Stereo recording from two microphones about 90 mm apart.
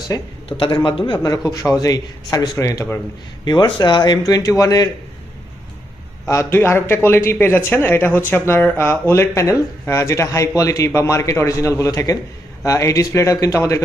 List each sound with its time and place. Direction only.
0.1 s speech: 35° left (ahead or behind)
0.4 s a man's voice: 70° left (ahead or behind); by 2.8 s 40° left (ahead or behind)
3.4 s speech: 55° left (ahead or behind)
6.2 s speech: 35° left (ahead or behind)